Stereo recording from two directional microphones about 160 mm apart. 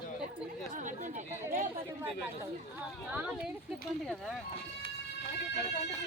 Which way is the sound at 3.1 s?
10° right (ahead or behind).